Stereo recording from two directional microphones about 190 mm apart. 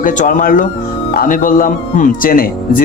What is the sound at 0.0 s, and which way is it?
Speech, 45° left (ahead or behind).